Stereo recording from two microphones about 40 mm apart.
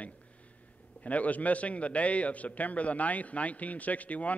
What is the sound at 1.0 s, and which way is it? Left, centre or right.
A man's voice, left.